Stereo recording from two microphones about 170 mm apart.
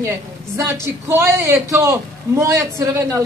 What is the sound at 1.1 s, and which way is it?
A man's voice, 15° right (ahead or behind).